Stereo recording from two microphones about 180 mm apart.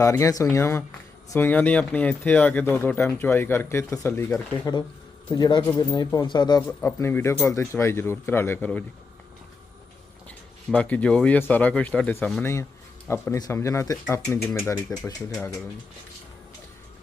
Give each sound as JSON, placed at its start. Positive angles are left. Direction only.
{"t": 0.0, "sound": "speech", "side_deg": 15}
{"t": 6.6, "sound": "speech", "side_deg": 15}
{"t": 10.2, "sound": "speech", "side_deg": 5}